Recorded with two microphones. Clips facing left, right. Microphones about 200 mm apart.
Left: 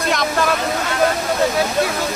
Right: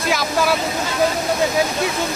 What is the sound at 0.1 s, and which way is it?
Vehicle, 5° right (ahead or behind).